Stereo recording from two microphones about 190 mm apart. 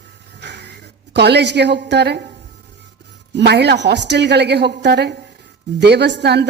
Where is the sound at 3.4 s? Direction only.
60° right (ahead or behind).